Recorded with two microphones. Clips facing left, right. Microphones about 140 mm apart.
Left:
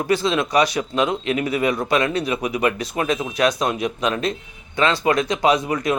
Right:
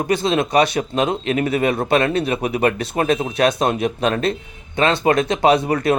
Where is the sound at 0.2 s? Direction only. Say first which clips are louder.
Right 2 dB; 50° right (ahead or behind).